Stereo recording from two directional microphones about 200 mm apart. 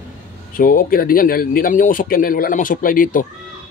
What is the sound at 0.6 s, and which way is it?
A man's voice, 45° left (ahead or behind).